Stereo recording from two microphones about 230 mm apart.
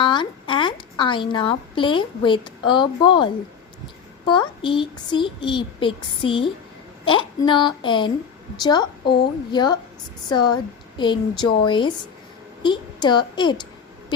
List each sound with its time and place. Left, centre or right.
0.0 s a woman's voice: centre
4.3 s a child's voice: left